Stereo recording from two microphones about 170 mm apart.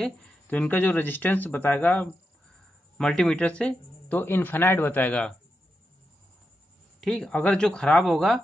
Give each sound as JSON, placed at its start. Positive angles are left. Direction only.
{"t": 0.0, "sound": "speech", "side_deg": 10}
{"t": 7.0, "sound": "speech", "side_deg": 5}